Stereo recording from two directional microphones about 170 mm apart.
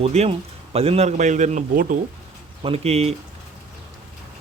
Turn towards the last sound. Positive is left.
turn(degrees=-35)  # may be behind; listen again after turning